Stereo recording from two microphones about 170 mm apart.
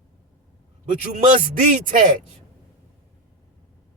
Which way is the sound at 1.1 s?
45° right (ahead or behind).